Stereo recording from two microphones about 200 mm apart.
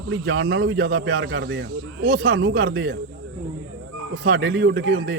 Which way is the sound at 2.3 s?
70° right (ahead or behind).